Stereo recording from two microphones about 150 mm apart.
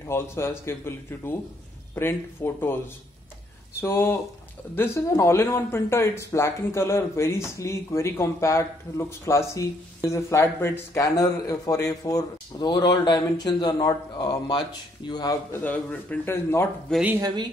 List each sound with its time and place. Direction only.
0.0 s speech: 15° left (ahead or behind)
3.8 s speech: 15° left (ahead or behind)
15.5 s speech: 10° left (ahead or behind)